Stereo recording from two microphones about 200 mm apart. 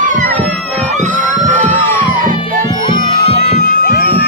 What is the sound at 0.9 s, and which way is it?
Crowd, 40° right (ahead or behind).